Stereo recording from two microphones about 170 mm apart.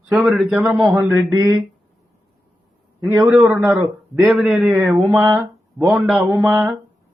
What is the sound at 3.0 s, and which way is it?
A man's voice, 10° right (ahead or behind).